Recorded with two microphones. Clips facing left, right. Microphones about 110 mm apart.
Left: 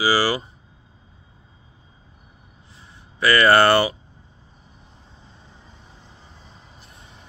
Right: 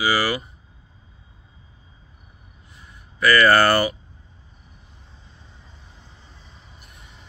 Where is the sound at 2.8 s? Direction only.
30° left (ahead or behind).